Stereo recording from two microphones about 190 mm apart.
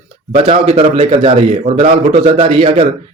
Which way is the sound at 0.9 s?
30° right (ahead or behind).